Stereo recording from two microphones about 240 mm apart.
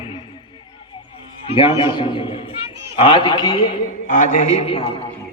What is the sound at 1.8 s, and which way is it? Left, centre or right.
A man's voice, centre.